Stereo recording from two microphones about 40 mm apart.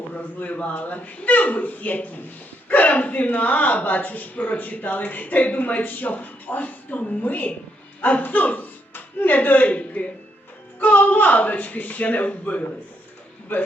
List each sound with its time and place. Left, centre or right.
0.1 s speech: left
13.5 s a man's voice: left